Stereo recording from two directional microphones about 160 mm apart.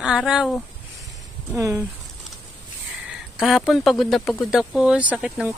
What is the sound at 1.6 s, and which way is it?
Speech, 20° right (ahead or behind).